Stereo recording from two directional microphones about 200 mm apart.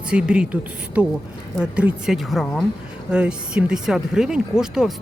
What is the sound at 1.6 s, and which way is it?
Speech, 5° right (ahead or behind).